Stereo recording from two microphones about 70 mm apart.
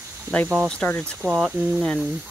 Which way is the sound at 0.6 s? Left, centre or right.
Centre.